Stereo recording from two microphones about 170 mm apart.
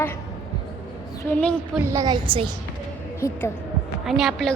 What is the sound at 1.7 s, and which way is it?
Speech, 15° right (ahead or behind).